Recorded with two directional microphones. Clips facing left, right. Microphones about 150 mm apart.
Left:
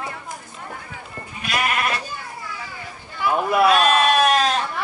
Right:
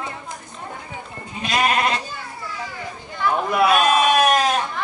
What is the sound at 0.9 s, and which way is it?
Sheep, 25° right (ahead or behind).